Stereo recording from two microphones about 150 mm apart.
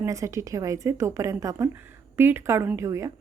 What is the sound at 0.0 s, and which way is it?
A woman's voice, 20° right (ahead or behind).